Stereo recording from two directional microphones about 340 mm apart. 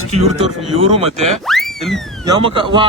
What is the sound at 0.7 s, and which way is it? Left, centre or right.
Speech, centre.